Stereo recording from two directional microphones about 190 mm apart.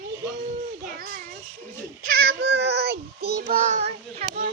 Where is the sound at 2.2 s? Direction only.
55° right (ahead or behind).